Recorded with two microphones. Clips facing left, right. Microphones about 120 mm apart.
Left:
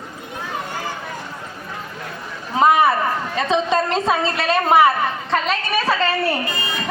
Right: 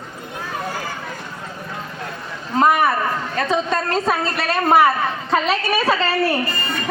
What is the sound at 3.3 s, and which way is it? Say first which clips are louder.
Speech: left 2 dB; 20° left (ahead or behind).